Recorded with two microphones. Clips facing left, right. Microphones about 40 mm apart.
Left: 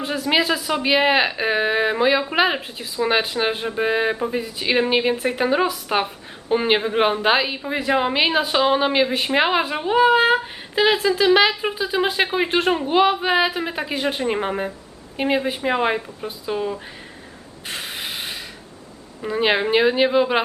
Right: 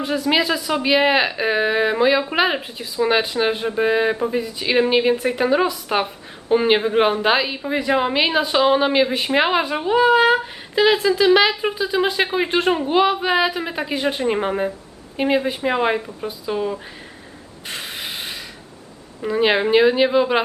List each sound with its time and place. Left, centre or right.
0.0 s a woman's voice: centre
17.7 s snort: centre
19.2 s a woman's voice: centre